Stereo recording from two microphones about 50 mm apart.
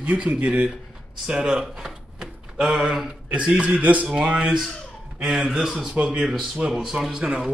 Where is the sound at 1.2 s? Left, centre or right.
Centre.